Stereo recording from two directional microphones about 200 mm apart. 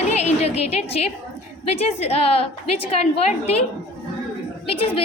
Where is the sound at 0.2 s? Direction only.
30° left (ahead or behind).